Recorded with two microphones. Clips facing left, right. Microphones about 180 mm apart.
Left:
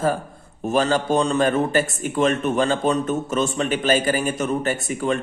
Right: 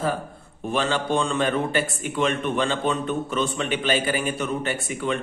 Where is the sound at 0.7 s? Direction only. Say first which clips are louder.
Left 4 dB; 40° left (ahead or behind).